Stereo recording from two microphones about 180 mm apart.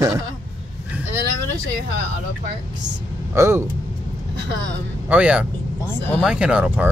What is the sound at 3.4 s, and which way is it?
Speech, 15° right (ahead or behind).